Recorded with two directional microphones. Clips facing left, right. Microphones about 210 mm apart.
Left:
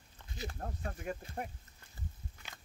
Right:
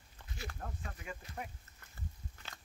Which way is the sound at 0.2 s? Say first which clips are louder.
Right 1 dB; 10° right (ahead or behind).